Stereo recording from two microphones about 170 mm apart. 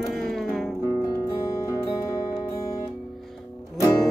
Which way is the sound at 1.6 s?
20° left (ahead or behind).